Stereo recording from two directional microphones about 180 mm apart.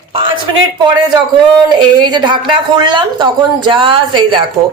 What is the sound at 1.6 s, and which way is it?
A woman's voice, 25° right (ahead or behind).